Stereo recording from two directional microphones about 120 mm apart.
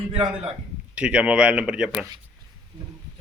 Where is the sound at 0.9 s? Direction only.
10° right (ahead or behind).